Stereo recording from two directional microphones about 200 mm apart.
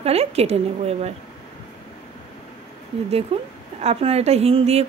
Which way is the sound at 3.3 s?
30° right (ahead or behind).